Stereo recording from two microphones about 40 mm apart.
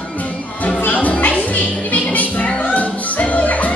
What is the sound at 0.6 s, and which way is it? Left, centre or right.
Music, left.